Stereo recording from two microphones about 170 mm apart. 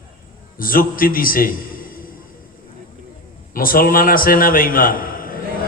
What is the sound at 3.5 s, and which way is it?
A man's voice, 55° left (ahead or behind).